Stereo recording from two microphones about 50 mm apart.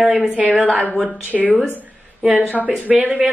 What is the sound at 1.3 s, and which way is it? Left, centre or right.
Speech, centre.